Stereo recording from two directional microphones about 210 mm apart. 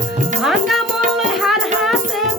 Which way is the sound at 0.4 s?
Centre (ahead or behind).